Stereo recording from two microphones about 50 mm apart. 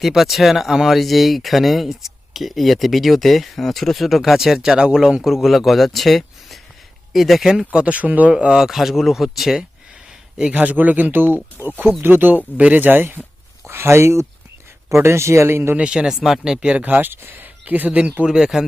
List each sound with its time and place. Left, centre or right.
0.0 s speech: centre
4.5 s speech: centre
7.7 s speech: right
8.3 s speech: centre
8.6 s speech: centre
10.3 s speech: centre
10.6 s speech: right
12.5 s speech: right
13.7 s speech: right
15.8 s speech: centre
16.7 s speech: right
17.7 s speech: right
18.3 s speech: centre